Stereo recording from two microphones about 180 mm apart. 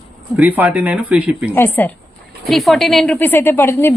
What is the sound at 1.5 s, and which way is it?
Speech, 10° left (ahead or behind).